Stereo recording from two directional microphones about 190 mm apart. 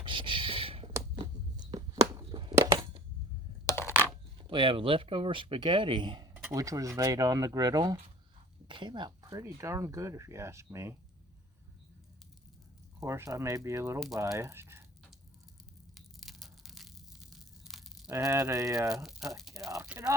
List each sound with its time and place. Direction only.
0.0 s a sound: 25° right (ahead or behind)
3.7 s a sound: 15° left (ahead or behind)
4.4 s speech: 25° right (ahead or behind)
13.0 s speech: 15° right (ahead or behind)
16.0 s tearing: centre (ahead or behind)
18.1 s speech: 15° right (ahead or behind)
19.0 s speech: centre (ahead or behind)
19.6 s a sound: 15° right (ahead or behind)
19.9 s speech: 15° right (ahead or behind)